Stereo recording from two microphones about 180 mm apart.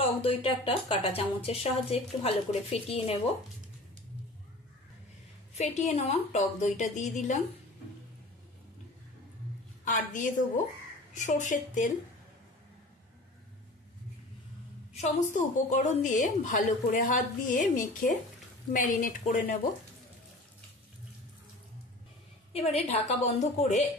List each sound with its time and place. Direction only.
0.0 s speech: 30° left (ahead or behind)
5.9 s speech: 35° left (ahead or behind)
9.8 s a woman's voice: 45° left (ahead or behind)
15.0 s a woman's voice: 45° left (ahead or behind)
22.5 s speech: 35° left (ahead or behind)